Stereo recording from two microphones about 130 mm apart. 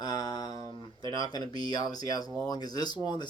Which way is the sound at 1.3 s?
30° left (ahead or behind).